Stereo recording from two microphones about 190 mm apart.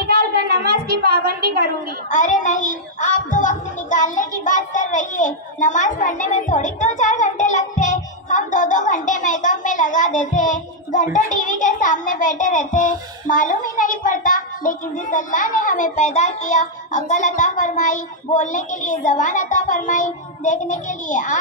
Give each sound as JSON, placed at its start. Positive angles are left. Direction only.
{"t": 0.0, "sound": "a sound", "side_deg": -55}
{"t": 2.0, "sound": "child singing", "side_deg": 40}
{"t": 11.1, "sound": "a child's voice", "side_deg": 40}